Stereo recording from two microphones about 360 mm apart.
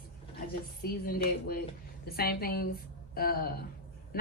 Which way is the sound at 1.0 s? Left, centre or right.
Left.